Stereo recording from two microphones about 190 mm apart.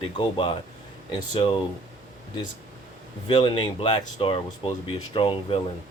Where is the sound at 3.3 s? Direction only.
25° left (ahead or behind).